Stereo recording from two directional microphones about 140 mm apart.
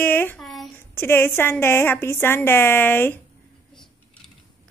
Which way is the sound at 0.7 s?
15° left (ahead or behind).